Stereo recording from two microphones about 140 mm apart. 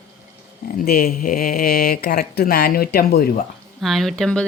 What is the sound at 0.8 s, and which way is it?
Speech, 90° left.